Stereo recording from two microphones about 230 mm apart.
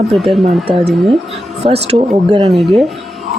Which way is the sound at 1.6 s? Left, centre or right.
Right.